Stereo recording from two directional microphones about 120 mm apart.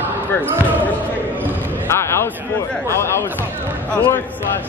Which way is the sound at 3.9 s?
10° left (ahead or behind).